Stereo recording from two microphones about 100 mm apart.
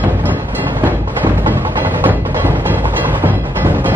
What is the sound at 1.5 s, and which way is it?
Music, 20° right (ahead or behind).